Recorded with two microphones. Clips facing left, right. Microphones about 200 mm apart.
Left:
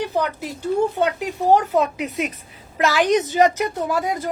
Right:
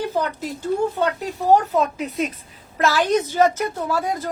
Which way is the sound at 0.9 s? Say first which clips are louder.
Left 1 dB; 15° left (ahead or behind).